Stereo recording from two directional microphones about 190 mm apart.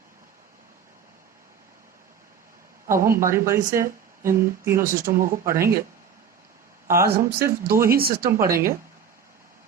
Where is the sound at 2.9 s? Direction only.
15° right (ahead or behind).